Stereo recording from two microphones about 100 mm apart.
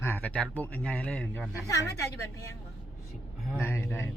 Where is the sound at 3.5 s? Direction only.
25° left (ahead or behind).